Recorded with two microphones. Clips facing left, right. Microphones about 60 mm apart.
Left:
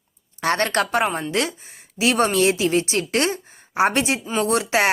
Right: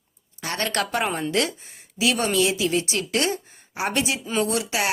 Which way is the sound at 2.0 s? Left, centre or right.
Left.